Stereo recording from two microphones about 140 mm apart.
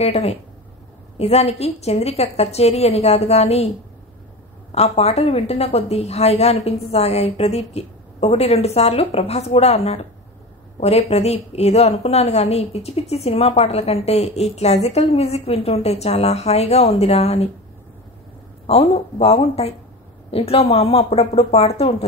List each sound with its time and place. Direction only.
0.0 s a woman's voice: 45° left (ahead or behind)
4.7 s a woman's voice: 50° left (ahead or behind)
18.7 s a woman's voice: 45° left (ahead or behind)